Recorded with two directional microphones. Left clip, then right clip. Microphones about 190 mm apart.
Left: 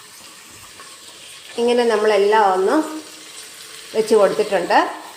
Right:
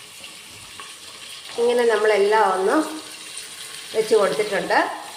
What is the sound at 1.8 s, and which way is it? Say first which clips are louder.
A woman's voice: left 2 dB; 30° left (ahead or behind).